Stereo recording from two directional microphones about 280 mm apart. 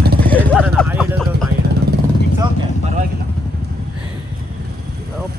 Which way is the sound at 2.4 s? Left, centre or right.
Right.